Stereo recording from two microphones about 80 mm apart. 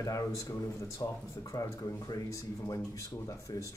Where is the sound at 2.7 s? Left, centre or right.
Left.